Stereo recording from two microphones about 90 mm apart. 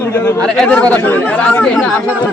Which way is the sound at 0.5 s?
10° left (ahead or behind).